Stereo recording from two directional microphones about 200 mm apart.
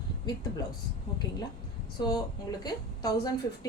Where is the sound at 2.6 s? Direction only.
20° left (ahead or behind).